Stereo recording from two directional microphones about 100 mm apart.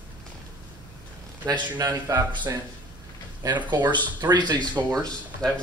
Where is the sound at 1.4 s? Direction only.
40° right (ahead or behind).